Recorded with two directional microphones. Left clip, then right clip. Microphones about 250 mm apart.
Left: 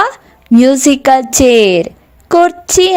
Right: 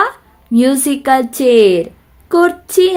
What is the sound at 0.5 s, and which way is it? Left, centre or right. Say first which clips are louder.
Speech: left 5 dB; left.